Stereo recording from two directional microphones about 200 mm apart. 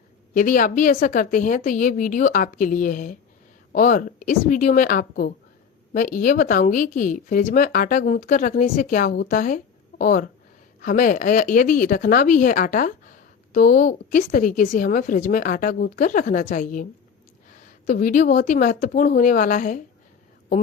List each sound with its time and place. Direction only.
0.3 s speech: 40° left (ahead or behind)
17.8 s speech: 40° left (ahead or behind)